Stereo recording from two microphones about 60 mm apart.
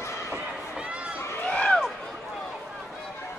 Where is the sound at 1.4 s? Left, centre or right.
Centre.